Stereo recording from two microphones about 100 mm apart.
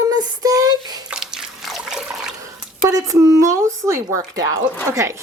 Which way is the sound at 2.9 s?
35° right (ahead or behind).